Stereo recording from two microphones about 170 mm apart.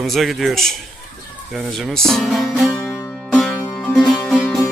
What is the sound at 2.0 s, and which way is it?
Speech, centre (ahead or behind).